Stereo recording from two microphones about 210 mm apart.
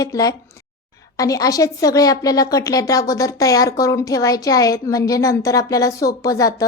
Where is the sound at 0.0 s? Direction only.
15° left (ahead or behind).